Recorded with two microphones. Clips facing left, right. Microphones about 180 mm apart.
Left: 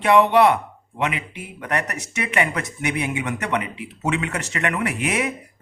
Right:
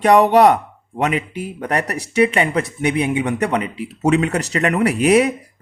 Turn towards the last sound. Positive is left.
turn(degrees=-35)  # may be behind; listen again after turning